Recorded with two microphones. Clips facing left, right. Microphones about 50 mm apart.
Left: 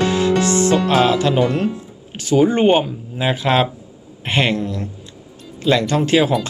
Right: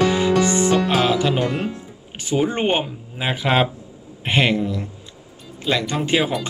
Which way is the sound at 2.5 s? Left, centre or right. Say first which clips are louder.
Left 6 dB; centre.